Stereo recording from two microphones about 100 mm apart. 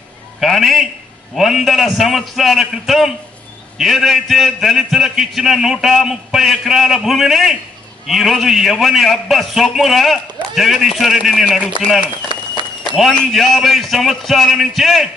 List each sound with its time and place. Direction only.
0.4 s a man's voice: centre (ahead or behind)
12.3 s applause: 50° right (ahead or behind)
12.9 s a man's voice: centre (ahead or behind)